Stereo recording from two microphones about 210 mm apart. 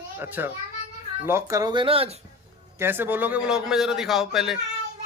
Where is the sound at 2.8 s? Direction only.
10° right (ahead or behind).